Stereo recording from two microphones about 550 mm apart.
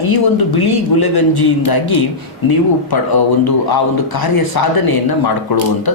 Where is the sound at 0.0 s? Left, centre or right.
Left.